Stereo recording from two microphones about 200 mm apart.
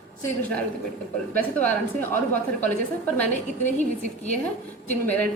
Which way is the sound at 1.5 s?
10° left (ahead or behind).